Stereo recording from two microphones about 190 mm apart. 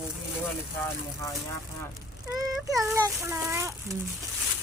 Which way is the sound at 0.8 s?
15° left (ahead or behind).